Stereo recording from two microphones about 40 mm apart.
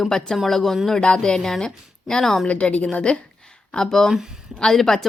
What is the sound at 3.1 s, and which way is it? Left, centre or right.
Speech, left.